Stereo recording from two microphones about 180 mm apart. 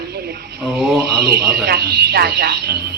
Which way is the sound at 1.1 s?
65° right (ahead or behind).